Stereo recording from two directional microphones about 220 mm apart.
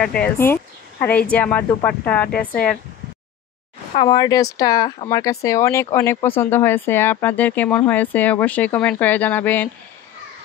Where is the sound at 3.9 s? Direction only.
20° left (ahead or behind).